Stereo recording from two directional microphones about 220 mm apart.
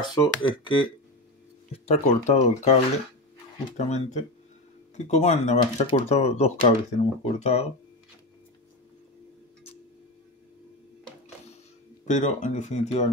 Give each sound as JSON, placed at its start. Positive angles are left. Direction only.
{"t": 0.0, "sound": "speech", "side_deg": 20}
{"t": 12.1, "sound": "speech", "side_deg": 35}